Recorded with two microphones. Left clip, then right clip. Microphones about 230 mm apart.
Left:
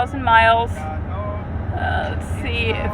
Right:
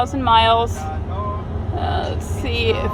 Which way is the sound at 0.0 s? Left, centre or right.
Centre.